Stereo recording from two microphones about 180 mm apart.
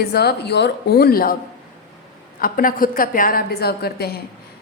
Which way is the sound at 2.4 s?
50° left (ahead or behind).